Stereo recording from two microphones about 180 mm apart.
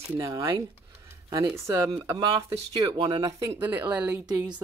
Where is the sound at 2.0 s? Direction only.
15° right (ahead or behind).